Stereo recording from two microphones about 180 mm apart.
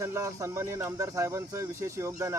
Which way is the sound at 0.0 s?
20° right (ahead or behind).